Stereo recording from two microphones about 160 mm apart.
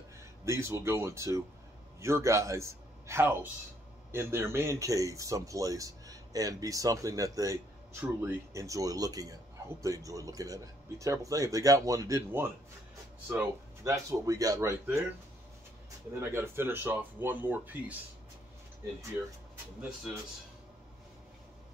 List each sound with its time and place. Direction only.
0.5 s a man's voice: 15° right (ahead or behind)
16.2 s speech: 15° right (ahead or behind)